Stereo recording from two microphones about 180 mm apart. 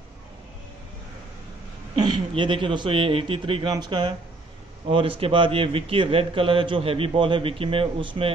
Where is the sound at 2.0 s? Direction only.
25° right (ahead or behind).